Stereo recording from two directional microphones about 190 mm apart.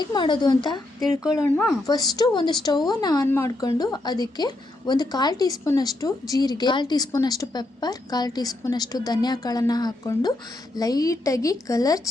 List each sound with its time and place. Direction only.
0.0 s speech: 25° left (ahead or behind)
0.9 s speech: centre (ahead or behind)
1.9 s a woman's voice: 20° left (ahead or behind)